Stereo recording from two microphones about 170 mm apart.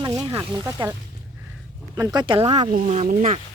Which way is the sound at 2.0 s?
25° right (ahead or behind).